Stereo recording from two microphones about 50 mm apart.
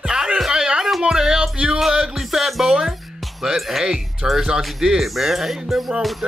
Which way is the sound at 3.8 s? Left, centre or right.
Centre.